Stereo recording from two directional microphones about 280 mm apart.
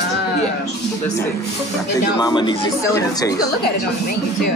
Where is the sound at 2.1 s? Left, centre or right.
Centre.